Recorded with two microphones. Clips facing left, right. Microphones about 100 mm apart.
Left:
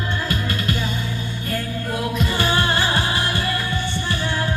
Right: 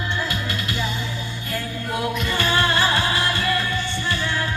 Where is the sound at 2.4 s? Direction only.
25° left (ahead or behind).